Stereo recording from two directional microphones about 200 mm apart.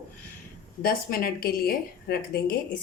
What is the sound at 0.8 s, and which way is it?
A woman's voice, 50° left (ahead or behind).